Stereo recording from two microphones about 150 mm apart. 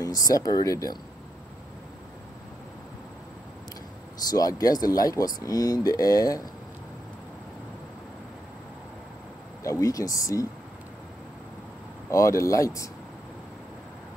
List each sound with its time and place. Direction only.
0.0 s speech: 25° left (ahead or behind)
4.3 s speech: 25° left (ahead or behind)
9.6 s speech: 20° left (ahead or behind)
12.1 s speech: 20° left (ahead or behind)